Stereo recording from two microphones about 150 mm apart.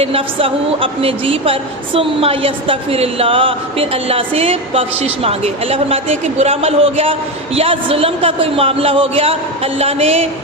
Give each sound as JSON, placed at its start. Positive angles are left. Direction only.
{"t": 0.0, "sound": "speech", "side_deg": -40}